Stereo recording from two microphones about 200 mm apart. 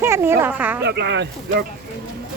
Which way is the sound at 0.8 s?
60° right (ahead or behind).